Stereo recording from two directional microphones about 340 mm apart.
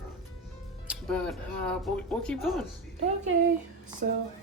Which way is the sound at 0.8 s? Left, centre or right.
Centre.